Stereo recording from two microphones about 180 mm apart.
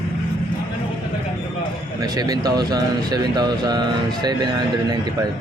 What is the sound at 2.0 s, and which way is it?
Speech, 20° right (ahead or behind).